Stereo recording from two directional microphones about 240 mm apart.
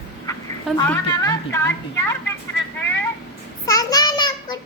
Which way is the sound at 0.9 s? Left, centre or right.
Centre.